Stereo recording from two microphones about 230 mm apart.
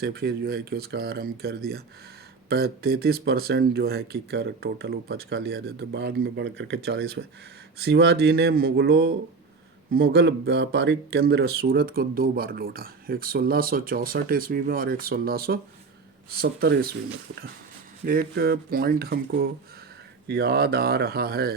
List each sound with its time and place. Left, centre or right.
0.0 s speech: right
18.0 s speech: right